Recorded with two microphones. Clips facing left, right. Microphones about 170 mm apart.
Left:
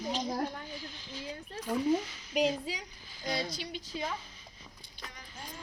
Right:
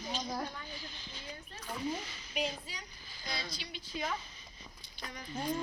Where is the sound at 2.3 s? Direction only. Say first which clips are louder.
Left 8 dB; 90° left.